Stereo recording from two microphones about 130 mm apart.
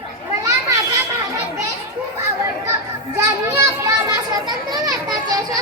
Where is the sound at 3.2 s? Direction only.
20° right (ahead or behind).